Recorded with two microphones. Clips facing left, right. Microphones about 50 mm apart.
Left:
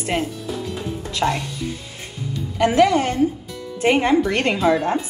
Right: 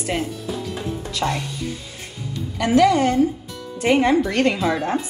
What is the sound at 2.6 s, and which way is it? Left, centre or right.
A woman's voice, left.